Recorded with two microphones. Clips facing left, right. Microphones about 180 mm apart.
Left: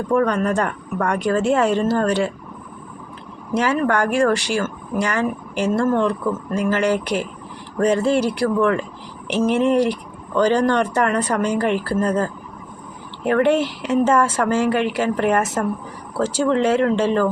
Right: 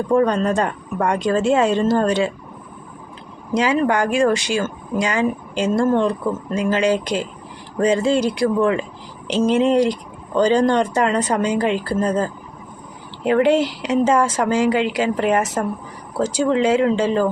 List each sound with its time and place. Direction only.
0.1 s a woman's voice: 20° right (ahead or behind)
3.5 s speech: 15° right (ahead or behind)